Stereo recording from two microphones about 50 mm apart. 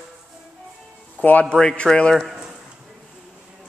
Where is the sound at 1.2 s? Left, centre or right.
Left.